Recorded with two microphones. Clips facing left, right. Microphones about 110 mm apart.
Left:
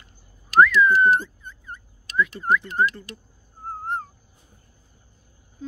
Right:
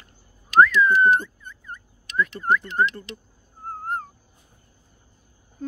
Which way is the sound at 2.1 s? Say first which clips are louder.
Even; 45° right (ahead or behind).